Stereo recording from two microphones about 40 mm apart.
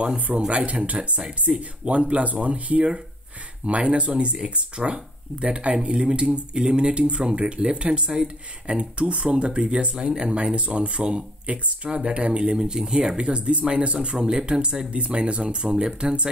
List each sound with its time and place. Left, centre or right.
0.5 s speech: right
1.5 s speech: centre
1.9 s speech: right
4.4 s speech: right
12.5 s speech: centre